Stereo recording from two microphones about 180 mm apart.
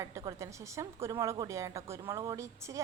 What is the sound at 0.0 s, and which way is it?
A woman's voice, 15° right (ahead or behind).